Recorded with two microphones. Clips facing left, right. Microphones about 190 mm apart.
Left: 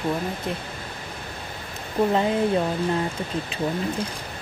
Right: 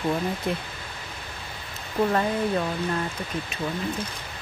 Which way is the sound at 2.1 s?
20° left (ahead or behind).